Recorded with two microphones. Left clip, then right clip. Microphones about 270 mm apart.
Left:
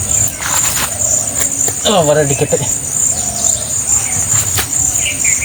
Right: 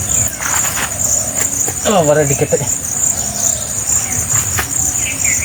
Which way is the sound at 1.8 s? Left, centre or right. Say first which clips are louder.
Left 1 dB; left.